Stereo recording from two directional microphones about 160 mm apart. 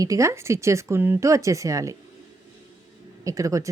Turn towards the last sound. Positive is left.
turn(degrees=-20)  # may be behind; listen again after turning